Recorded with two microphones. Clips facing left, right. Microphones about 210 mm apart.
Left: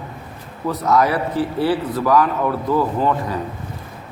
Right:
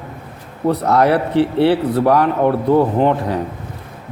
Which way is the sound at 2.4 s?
25° right (ahead or behind).